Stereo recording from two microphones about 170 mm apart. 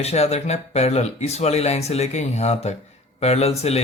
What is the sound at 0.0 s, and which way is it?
Speech, 40° left (ahead or behind).